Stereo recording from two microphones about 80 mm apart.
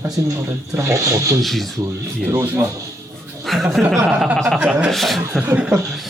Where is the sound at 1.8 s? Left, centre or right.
Right.